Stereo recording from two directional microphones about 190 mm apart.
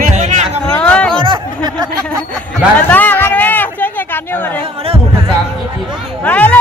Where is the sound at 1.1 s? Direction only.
25° right (ahead or behind).